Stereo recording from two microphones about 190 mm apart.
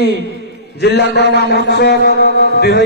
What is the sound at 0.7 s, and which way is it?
Mantra, 65° left (ahead or behind).